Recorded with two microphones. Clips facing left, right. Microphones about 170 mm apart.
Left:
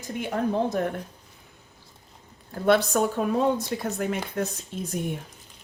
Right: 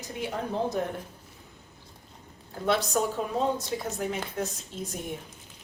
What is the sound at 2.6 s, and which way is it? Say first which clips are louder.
A woman's voice: left 5 dB; 60° left (ahead or behind).